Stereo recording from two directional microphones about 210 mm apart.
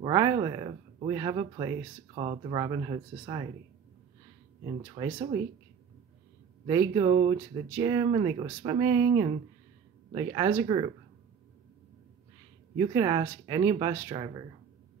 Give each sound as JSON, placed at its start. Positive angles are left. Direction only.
{"t": 0.0, "sound": "speech", "side_deg": -20}
{"t": 5.0, "sound": "speech", "side_deg": -20}
{"t": 6.7, "sound": "speech", "side_deg": -20}
{"t": 12.7, "sound": "speech", "side_deg": -20}